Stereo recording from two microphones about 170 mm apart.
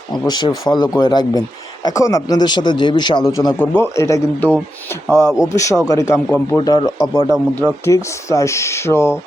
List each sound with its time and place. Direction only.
0.1 s a man's voice: 25° left (ahead or behind)
7.3 s speech: 5° right (ahead or behind)
7.9 s speech: 15° left (ahead or behind)